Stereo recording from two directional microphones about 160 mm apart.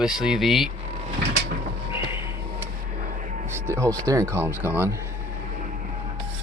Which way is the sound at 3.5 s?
15° right (ahead or behind).